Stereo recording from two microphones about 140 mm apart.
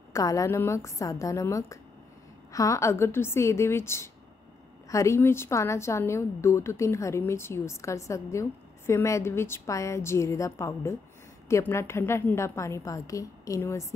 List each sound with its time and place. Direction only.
0.1 s a woman's voice: 25° left (ahead or behind)